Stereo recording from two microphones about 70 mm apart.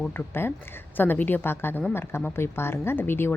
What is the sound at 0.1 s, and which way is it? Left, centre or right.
A woman's voice, left.